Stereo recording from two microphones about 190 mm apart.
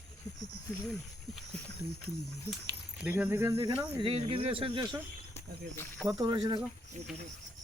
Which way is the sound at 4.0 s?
30° right (ahead or behind).